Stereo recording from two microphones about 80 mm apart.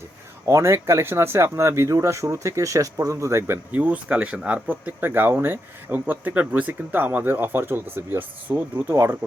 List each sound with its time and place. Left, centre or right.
0.4 s speech: right
3.7 s speech: centre